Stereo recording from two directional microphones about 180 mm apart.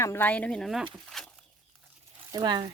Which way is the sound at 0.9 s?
Centre (ahead or behind).